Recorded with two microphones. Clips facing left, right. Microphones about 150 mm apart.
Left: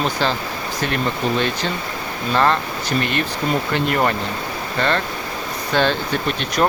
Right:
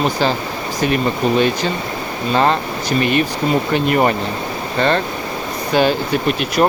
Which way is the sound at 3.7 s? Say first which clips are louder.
Right 4 dB; 15° right (ahead or behind).